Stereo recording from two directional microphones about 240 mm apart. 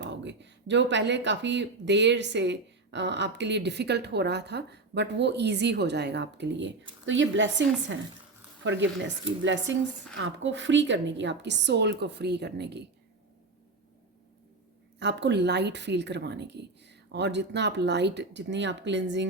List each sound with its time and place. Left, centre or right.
0.0 s speech: right
14.9 s speech: right